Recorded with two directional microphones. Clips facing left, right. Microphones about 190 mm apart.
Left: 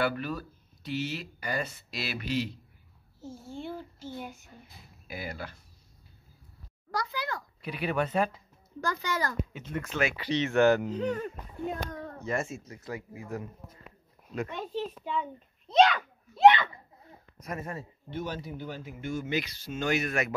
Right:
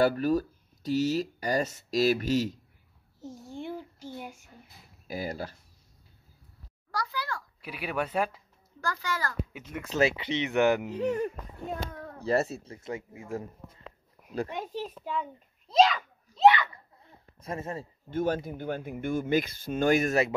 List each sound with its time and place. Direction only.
0.0 s speech: 40° right (ahead or behind)
3.2 s speech: 15° right (ahead or behind)
5.0 s speech: 40° right (ahead or behind)
6.9 s a sound: 20° left (ahead or behind)
7.6 s speech: 5° right (ahead or behind)
8.8 s a child's voice: 20° left (ahead or behind)
9.5 s speech: 10° right (ahead or behind)
9.9 s a child's voice: 25° right (ahead or behind); by 12.2 s centre (ahead or behind)
12.2 s speech: 35° right (ahead or behind)
14.5 s speech: 15° right (ahead or behind)
16.3 s a child's voice: 20° left (ahead or behind)
17.3 s speech: 30° right (ahead or behind)
18.1 s speech: 50° right (ahead or behind)